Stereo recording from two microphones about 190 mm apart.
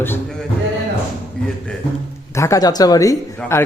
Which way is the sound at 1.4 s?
5° left (ahead or behind).